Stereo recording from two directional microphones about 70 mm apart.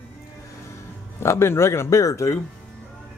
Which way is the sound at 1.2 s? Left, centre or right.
Left.